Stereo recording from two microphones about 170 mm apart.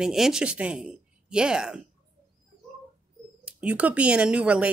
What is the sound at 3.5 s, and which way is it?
Speech, 5° right (ahead or behind).